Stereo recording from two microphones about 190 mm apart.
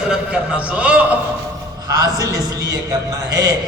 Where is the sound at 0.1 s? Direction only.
5° right (ahead or behind).